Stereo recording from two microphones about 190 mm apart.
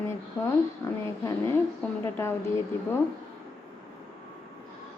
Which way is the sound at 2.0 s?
15° left (ahead or behind).